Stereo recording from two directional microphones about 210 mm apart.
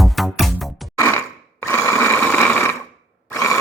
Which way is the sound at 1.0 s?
10° left (ahead or behind).